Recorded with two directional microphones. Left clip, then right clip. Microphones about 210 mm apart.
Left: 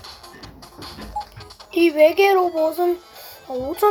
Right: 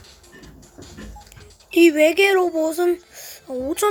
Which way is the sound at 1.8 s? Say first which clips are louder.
Left 1 dB; 50° right (ahead or behind).